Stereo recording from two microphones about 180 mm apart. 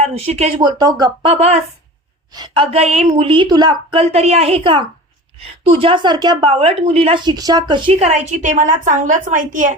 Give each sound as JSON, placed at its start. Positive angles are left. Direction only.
{"t": 0.0, "sound": "a woman's voice", "side_deg": -35}
{"t": 1.3, "sound": "a woman's voice", "side_deg": -35}
{"t": 3.9, "sound": "a woman's voice", "side_deg": -35}